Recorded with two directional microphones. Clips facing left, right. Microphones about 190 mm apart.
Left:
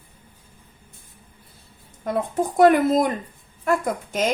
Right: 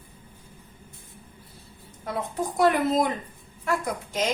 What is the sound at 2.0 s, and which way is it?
Speech, 50° left (ahead or behind).